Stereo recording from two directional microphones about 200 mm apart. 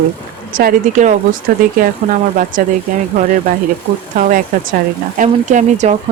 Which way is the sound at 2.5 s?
40° right (ahead or behind).